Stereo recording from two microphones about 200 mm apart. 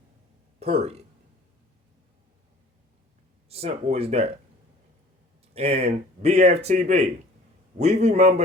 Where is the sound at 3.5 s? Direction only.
30° right (ahead or behind).